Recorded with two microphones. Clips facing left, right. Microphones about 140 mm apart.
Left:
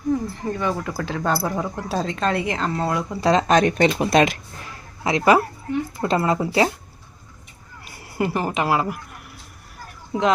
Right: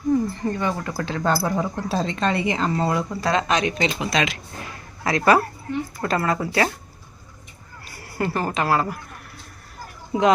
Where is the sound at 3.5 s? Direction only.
50° left (ahead or behind).